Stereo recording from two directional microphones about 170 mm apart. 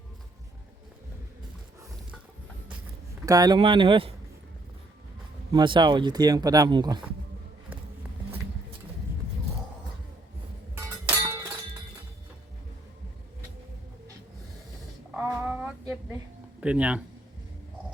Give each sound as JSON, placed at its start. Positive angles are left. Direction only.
{"t": 3.2, "sound": "speech", "side_deg": -20}
{"t": 5.5, "sound": "speech", "side_deg": -25}
{"t": 10.8, "sound": "music", "side_deg": -15}
{"t": 15.1, "sound": "music", "side_deg": -10}
{"t": 16.6, "sound": "speech", "side_deg": -5}